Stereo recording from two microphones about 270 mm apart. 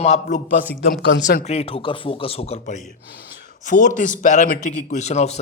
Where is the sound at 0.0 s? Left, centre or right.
Left.